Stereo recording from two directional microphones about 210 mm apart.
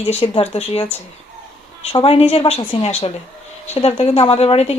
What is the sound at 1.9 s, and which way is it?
Speech, 25° left (ahead or behind).